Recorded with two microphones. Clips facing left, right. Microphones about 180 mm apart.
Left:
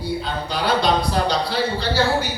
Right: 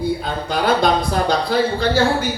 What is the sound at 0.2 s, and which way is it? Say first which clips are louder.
Speech: right 3 dB; 50° right (ahead or behind).